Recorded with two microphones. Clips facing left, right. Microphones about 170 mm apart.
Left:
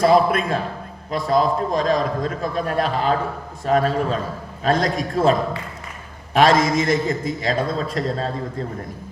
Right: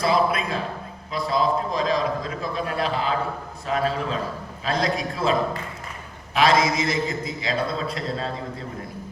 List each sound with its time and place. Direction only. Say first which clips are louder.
0.0 s a man's voice: left 6 dB; 50° left (ahead or behind)